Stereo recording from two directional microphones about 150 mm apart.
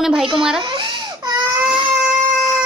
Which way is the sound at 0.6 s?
30° right (ahead or behind).